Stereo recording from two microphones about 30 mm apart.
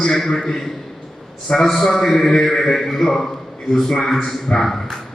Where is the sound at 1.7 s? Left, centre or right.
Centre.